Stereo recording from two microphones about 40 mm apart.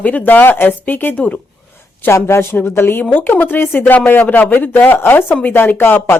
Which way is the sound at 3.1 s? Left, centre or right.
Left.